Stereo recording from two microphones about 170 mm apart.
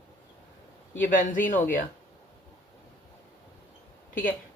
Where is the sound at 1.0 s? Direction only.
50° left (ahead or behind).